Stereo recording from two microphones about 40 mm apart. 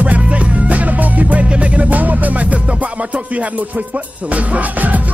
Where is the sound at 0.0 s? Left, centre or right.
Right.